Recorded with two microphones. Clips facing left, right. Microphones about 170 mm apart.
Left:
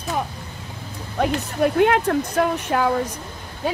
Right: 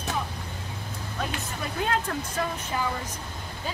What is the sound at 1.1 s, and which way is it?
Speech, 65° left (ahead or behind).